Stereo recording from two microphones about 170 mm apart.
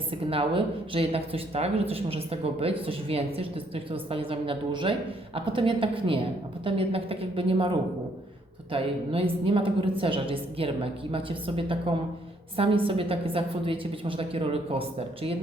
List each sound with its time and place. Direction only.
0.1 s speech: 30° right (ahead or behind)
8.7 s speech: 35° right (ahead or behind)